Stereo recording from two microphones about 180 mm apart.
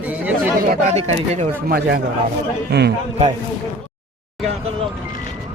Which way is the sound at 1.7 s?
60° right (ahead or behind).